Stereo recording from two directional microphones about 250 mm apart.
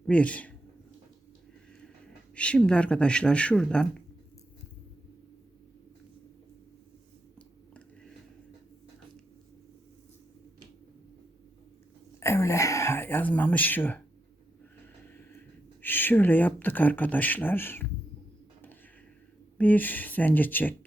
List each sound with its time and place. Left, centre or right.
0.0 s speech: centre
2.3 s speech: centre
7.3 s a sound: centre
12.2 s speech: centre
15.1 s speech: centre
19.5 s speech: centre